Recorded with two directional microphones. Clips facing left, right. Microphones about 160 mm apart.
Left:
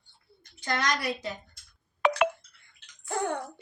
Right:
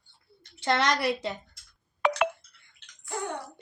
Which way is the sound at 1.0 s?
25° right (ahead or behind).